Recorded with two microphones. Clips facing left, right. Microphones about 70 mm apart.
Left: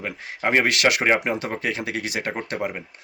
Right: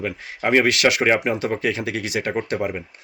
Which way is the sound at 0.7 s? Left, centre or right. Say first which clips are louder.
Right 2 dB; left.